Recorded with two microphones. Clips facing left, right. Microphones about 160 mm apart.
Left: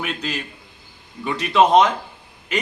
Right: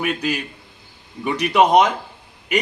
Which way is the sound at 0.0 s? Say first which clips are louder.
Right 5 dB; 10° right (ahead or behind).